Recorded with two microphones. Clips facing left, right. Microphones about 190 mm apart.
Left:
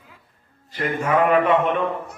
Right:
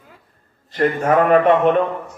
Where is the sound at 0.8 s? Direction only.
45° right (ahead or behind).